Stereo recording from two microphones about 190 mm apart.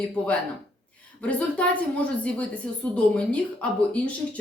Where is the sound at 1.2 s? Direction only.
5° left (ahead or behind).